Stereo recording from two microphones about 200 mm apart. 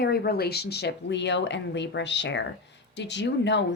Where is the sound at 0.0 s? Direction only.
50° left (ahead or behind).